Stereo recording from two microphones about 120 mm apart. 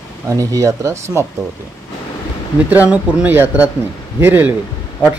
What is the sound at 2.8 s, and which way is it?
Speech, 10° right (ahead or behind).